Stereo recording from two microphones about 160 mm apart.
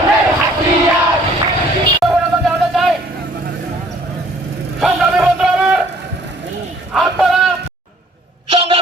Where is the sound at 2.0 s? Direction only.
Centre (ahead or behind).